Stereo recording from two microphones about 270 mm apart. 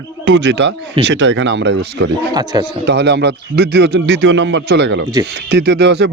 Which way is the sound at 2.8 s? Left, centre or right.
Right.